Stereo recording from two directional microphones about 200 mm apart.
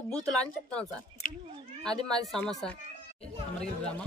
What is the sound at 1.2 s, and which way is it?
Cat, 40° left (ahead or behind).